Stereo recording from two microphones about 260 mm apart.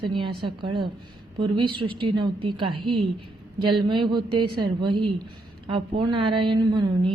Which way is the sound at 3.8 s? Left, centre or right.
Centre.